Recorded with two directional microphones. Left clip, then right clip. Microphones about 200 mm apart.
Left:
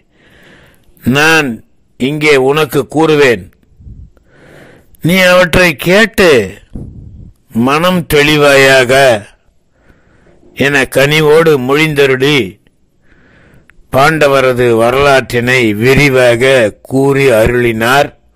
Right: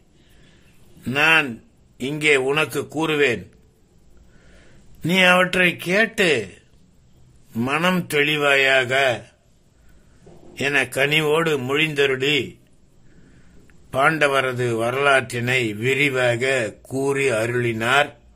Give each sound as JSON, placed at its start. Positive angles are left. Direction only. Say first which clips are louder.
{"t": 1.0, "sound": "a man's voice", "louder": "left 9 dB", "side_deg": 40}
{"t": 4.6, "sound": "a man's voice", "louder": "left 12 dB", "side_deg": 40}
{"t": 10.5, "sound": "a man's voice", "louder": "left 11 dB", "side_deg": 40}